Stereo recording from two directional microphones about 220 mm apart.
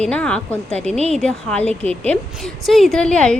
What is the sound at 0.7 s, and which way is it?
Speech, 30° right (ahead or behind).